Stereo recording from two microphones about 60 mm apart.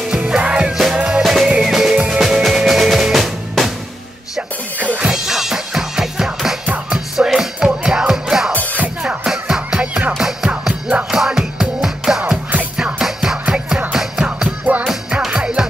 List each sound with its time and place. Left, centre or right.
0.4 s music: centre
1.2 s music: centre
4.9 s music: centre
12.2 s music: centre